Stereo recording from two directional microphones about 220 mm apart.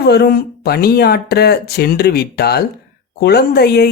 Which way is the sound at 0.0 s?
50° left (ahead or behind).